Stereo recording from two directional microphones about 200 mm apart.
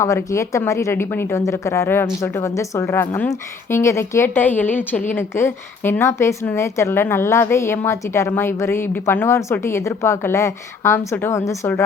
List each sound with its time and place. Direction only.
0.0 s a woman's voice: 15° left (ahead or behind)